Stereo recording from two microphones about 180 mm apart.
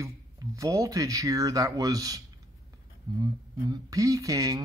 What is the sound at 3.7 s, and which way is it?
Speech, 20° right (ahead or behind).